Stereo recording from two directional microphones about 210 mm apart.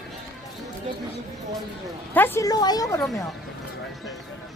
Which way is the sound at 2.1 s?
10° left (ahead or behind).